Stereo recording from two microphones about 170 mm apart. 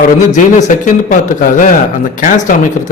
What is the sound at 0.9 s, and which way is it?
A man's voice, 50° left (ahead or behind).